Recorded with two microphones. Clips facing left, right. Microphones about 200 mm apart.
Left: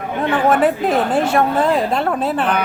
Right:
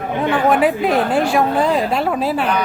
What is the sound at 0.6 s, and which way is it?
A woman's voice, centre (ahead or behind).